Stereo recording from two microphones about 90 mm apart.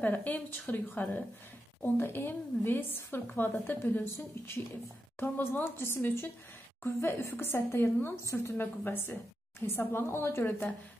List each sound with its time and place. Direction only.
0.0 s a woman's voice: 20° left (ahead or behind)